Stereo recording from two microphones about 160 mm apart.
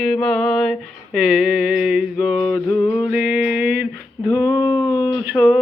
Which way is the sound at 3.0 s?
5° right (ahead or behind).